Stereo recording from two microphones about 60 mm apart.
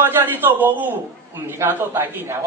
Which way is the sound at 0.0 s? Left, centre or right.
Right.